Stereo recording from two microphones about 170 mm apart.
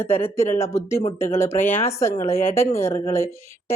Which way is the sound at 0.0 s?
15° left (ahead or behind).